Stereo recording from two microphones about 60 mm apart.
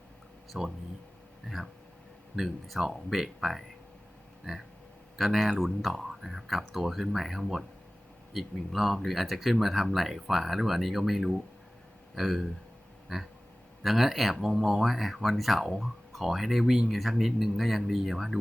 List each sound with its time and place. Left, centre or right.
0.5 s speech: centre
5.1 s speech: centre